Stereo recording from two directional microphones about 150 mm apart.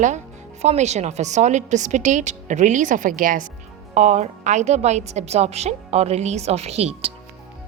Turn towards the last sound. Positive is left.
turn(degrees=-45)  # may be behind; listen again after turning